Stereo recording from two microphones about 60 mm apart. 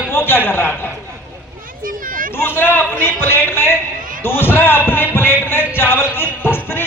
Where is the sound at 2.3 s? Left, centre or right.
Left.